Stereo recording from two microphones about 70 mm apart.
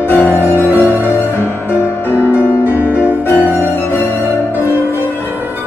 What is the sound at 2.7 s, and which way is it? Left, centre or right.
Music, right.